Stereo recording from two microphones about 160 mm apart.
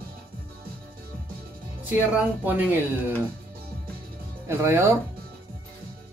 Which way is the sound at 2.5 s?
10° right (ahead or behind).